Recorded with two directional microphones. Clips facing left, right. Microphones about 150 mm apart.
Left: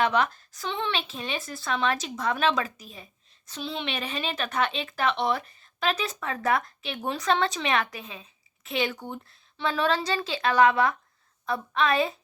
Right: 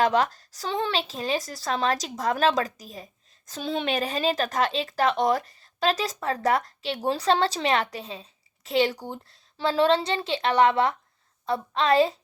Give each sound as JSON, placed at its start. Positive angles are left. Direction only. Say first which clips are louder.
{"t": 0.0, "sound": "speech", "louder": "right 2 dB", "side_deg": -35}